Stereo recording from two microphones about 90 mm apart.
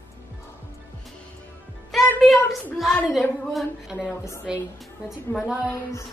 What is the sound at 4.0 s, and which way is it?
Speech, 35° left (ahead or behind).